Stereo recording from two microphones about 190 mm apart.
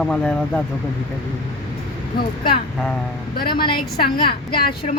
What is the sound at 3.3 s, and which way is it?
A woman's voice, 25° left (ahead or behind).